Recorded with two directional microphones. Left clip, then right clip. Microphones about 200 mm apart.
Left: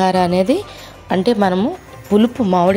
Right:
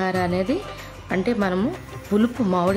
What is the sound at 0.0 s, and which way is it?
Speech, 25° left (ahead or behind).